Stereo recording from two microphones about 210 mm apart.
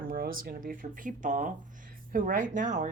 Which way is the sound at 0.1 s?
45° right (ahead or behind).